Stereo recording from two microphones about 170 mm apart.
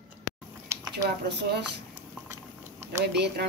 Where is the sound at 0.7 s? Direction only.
15° right (ahead or behind).